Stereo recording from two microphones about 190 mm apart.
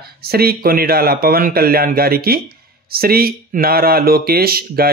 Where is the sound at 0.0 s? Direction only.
55° right (ahead or behind).